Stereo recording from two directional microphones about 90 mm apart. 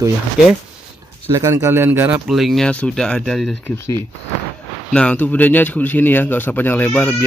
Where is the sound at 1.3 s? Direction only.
35° right (ahead or behind); by 2.2 s 20° right (ahead or behind).